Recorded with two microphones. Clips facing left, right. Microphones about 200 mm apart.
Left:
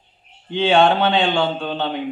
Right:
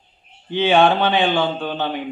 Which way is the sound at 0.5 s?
5° right (ahead or behind).